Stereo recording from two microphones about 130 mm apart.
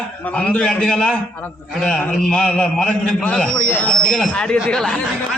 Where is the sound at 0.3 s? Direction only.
10° left (ahead or behind).